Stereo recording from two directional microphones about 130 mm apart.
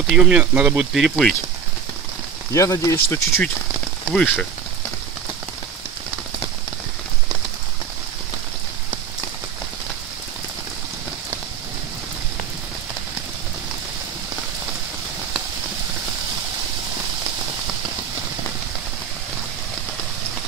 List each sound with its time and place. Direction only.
0.0 s speech: 5° right (ahead or behind)
1.0 s speech: centre (ahead or behind)
2.5 s speech: 25° left (ahead or behind)
4.0 s speech: 10° left (ahead or behind)